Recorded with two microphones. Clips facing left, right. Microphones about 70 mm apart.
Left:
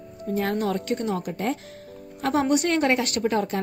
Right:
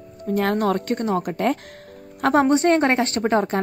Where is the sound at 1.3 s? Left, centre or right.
Right.